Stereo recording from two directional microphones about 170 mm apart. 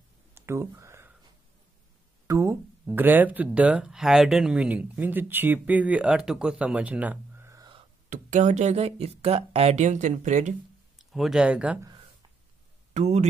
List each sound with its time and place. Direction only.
0.3 s a sound: 15° right (ahead or behind)
2.2 s speech: 15° right (ahead or behind)
8.1 s speech: 45° right (ahead or behind)
11.0 s speech: centre (ahead or behind)
11.8 s a sound: 25° right (ahead or behind)
12.9 s speech: 40° right (ahead or behind)